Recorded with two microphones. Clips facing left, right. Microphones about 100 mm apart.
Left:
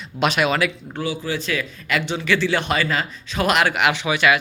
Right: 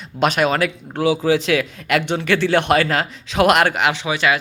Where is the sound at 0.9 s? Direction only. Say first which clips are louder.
Right 8 dB; 90° right; by 3.7 s 55° right (ahead or behind).